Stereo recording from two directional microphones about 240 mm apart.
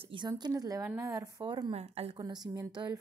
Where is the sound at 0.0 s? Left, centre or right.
Centre.